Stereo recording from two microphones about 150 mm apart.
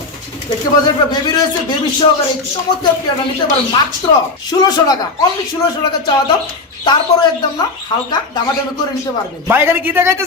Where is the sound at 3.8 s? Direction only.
30° left (ahead or behind).